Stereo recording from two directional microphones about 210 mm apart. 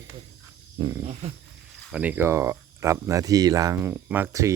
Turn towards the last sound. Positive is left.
turn(degrees=-10)  # may be behind; listen again after turning